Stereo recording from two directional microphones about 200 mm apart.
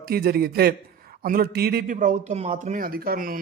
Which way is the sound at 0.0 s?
50° right (ahead or behind).